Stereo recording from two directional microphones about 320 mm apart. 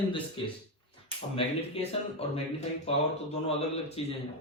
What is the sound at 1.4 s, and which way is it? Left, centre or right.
Speech, centre.